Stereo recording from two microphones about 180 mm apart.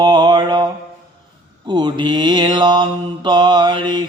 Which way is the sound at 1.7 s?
25° right (ahead or behind).